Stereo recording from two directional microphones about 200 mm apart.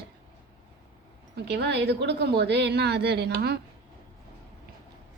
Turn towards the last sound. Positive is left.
turn(degrees=-55)  # may be behind; listen again after turning